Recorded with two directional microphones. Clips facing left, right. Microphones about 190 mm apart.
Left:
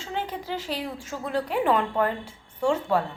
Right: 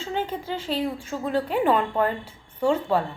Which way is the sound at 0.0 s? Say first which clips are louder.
Right 3 dB; centre (ahead or behind).